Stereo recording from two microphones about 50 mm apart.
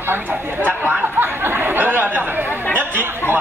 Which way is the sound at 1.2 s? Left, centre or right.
Right.